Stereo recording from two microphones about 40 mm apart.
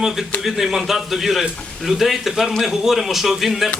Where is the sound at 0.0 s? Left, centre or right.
Centre.